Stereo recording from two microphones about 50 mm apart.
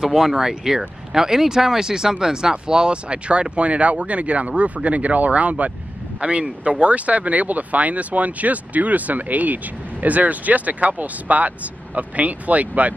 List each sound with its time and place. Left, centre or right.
0.0 s speech: centre; by 12.9 s right